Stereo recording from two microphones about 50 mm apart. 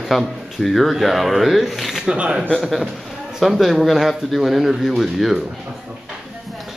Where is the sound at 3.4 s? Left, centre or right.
Centre.